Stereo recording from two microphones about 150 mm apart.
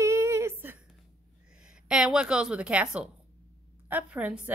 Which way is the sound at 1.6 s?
5° right (ahead or behind).